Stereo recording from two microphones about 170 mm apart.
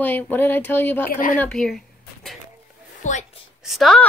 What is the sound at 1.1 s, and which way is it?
Speech, 50° left (ahead or behind).